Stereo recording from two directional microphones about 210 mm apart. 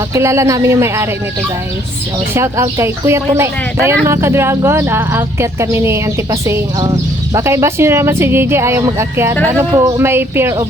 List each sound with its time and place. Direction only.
0.1 s speech: 15° right (ahead or behind)
2.3 s speech: 15° right (ahead or behind)